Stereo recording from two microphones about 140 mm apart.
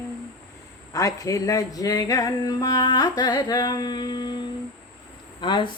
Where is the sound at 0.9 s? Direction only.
25° left (ahead or behind).